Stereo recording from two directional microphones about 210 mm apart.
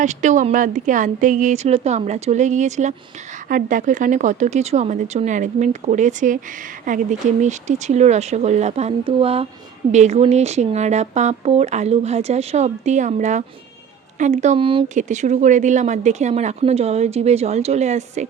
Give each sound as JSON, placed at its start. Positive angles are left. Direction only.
{"t": 0.0, "sound": "speech", "side_deg": -35}